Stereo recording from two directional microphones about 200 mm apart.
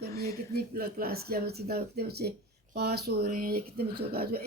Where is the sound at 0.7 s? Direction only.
50° right (ahead or behind).